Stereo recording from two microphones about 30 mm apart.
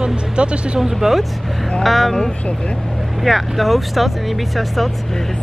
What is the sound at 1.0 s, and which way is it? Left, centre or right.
Speech, centre.